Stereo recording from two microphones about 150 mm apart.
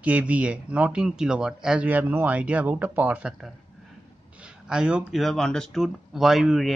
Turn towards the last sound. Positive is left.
turn(degrees=0)  # may be behind; listen again after turning